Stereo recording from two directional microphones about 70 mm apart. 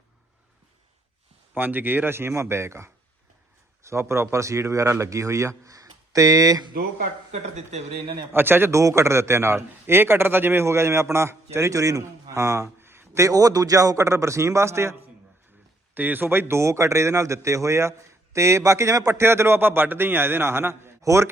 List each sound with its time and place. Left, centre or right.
1.5 s a man's voice: right
8.3 s a man's voice: right
8.8 s a man's voice: right
13.2 s speech: right
16.0 s speech: right
19.2 s a man's voice: right
21.0 s speech: right